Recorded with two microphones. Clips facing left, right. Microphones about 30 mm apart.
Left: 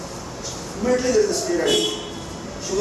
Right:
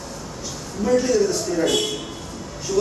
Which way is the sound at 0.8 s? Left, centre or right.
Centre.